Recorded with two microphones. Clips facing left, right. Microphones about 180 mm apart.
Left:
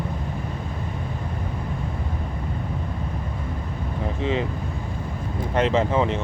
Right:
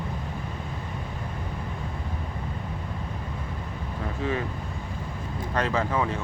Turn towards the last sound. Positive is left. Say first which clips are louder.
# left 5 dB
turn(degrees=20)  # may be behind; listen again after turning